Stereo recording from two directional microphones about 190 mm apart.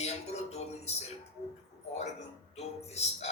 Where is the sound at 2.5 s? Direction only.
35° left (ahead or behind).